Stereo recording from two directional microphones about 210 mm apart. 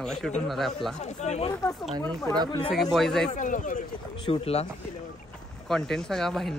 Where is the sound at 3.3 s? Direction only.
35° left (ahead or behind).